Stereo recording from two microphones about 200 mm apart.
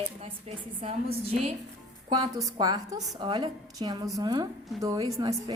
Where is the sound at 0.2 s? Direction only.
30° right (ahead or behind).